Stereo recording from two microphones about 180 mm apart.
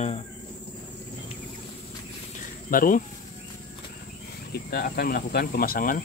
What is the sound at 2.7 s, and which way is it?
Speech, 50° left (ahead or behind).